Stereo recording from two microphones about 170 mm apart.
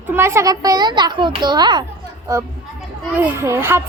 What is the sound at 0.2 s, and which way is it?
A child's voice, 15° right (ahead or behind).